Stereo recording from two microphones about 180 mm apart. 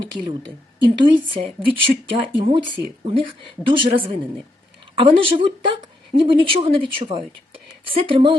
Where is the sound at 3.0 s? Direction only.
30° right (ahead or behind).